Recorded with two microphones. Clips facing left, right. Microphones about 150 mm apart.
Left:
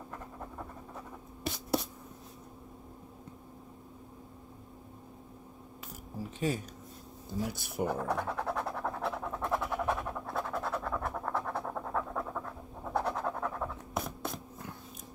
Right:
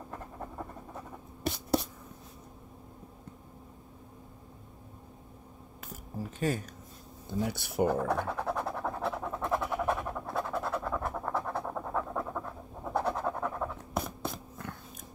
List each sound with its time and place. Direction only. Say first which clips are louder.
6.4 s speech: right 1 dB; 50° right (ahead or behind)
7.2 s speech: right 3 dB; centre (ahead or behind)
7.6 s scratch: right 6 dB; centre (ahead or behind)